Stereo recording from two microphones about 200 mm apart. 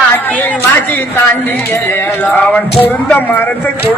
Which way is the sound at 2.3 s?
10° left (ahead or behind).